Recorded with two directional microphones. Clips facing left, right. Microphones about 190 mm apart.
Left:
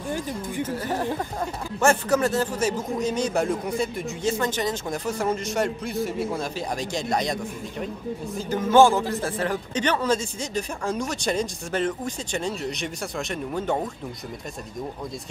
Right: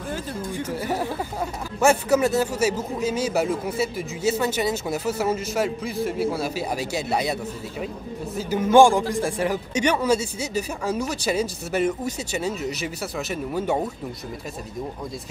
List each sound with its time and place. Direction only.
0.1 s speech: 15° left (ahead or behind)
0.7 s speech: 10° right (ahead or behind)
8.4 s speech: 10° right (ahead or behind)